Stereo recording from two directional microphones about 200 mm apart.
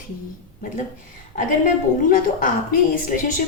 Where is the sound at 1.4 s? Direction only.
45° left (ahead or behind).